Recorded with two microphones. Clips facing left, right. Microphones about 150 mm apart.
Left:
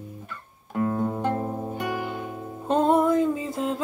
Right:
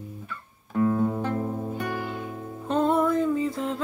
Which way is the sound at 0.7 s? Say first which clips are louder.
Right 2 dB; 20° left (ahead or behind).